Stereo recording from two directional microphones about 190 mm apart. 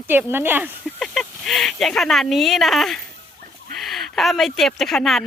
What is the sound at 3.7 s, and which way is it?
Speech, centre (ahead or behind).